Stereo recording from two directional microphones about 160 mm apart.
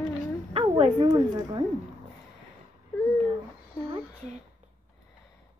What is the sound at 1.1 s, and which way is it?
Speech, 25° right (ahead or behind).